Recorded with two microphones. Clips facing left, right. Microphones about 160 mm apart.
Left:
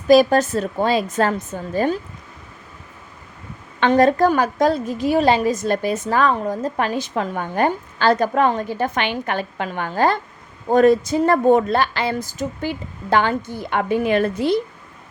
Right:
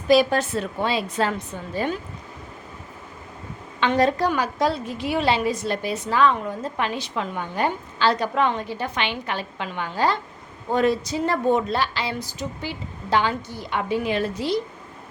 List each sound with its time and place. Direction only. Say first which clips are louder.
0.1 s a woman's voice: left 5 dB; 45° left (ahead or behind)
3.8 s a woman's voice: left 5 dB; 50° left (ahead or behind)